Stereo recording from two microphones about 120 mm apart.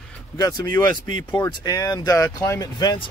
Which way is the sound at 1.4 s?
30° left (ahead or behind).